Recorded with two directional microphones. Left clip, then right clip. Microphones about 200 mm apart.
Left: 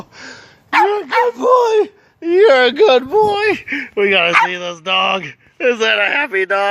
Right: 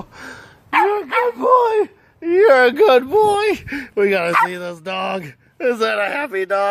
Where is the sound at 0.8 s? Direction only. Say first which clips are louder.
Left 3 dB; 35° left (ahead or behind).